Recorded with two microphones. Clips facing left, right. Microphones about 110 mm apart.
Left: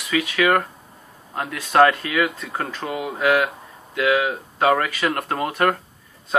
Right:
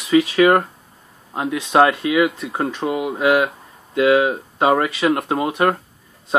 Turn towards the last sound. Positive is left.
turn(degrees=-15)  # may be behind; listen again after turning